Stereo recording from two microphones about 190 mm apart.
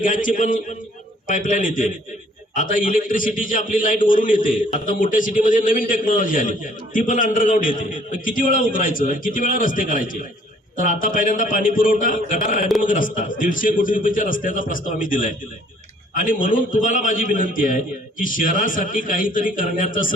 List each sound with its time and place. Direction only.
0.0 s a man's voice: 45° left (ahead or behind)